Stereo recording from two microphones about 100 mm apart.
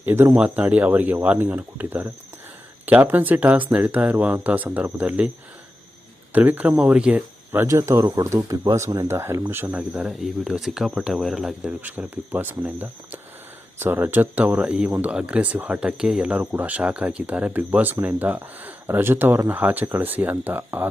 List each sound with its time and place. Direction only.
0.0 s speech: 25° right (ahead or behind)
6.3 s speech: 15° right (ahead or behind)
7.7 s speech: 30° right (ahead or behind)
9.0 s speech: 25° right (ahead or behind)
10.1 s speech: centre (ahead or behind)
11.8 s speech: 15° right (ahead or behind)